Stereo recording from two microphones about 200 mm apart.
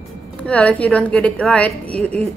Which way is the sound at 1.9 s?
30° right (ahead or behind).